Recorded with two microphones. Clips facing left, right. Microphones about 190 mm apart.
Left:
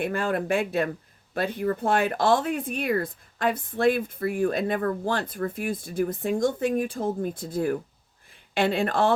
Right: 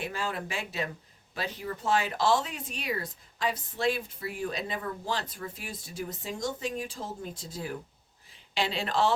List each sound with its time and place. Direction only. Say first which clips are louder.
0.0 s speech: left 8 dB; 55° left (ahead or behind)